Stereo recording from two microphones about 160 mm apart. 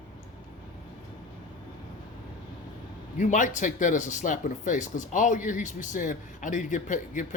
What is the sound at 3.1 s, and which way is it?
Speech, 50° left (ahead or behind).